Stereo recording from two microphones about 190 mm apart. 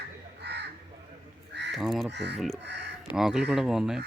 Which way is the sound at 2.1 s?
65° right (ahead or behind).